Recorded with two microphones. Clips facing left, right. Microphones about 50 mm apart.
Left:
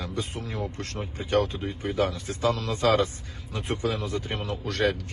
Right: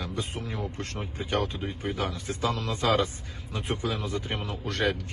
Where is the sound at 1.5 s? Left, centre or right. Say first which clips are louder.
Left 2 dB; centre.